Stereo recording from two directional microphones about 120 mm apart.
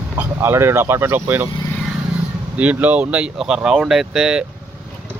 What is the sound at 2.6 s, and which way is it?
Speech, 15° right (ahead or behind).